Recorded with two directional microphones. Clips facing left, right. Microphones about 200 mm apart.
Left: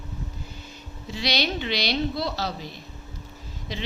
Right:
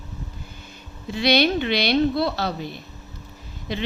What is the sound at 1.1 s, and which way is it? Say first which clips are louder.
A woman's voice: right 8 dB; 55° right (ahead or behind).